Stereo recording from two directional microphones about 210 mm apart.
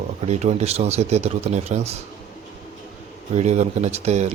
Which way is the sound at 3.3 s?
35° right (ahead or behind).